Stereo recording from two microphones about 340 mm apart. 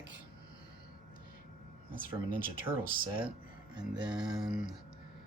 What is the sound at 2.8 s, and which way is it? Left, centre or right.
Speech, right.